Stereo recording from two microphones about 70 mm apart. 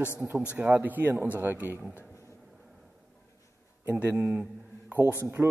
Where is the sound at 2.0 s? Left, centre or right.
Left.